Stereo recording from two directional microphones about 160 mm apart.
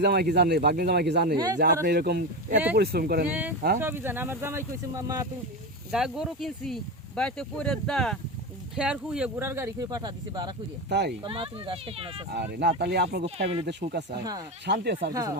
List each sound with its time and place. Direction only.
0.0 s speech: 85° right
2.7 s speech: 70° right (ahead or behind)
3.2 s speech: 10° right (ahead or behind)
5.9 s speech: 5° right (ahead or behind); by 10.5 s 25° right (ahead or behind)
10.8 s speech: 90° right
11.2 s speech: 30° right (ahead or behind)
12.3 s speech: 90° right
13.2 s speech: 40° right (ahead or behind)
13.8 s speech: 60° right (ahead or behind)
14.7 s speech: 90° right